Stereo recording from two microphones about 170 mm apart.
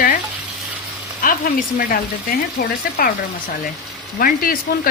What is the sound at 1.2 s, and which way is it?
Speech, 55° left (ahead or behind).